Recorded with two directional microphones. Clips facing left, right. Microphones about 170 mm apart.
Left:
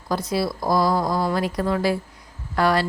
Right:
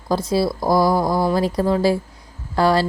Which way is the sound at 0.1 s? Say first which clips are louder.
Right 4 dB; 30° right (ahead or behind).